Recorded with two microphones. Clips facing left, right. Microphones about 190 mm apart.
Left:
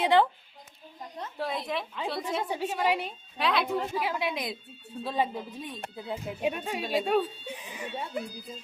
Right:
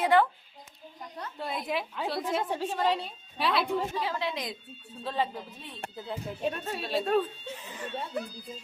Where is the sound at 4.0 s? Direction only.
10° left (ahead or behind).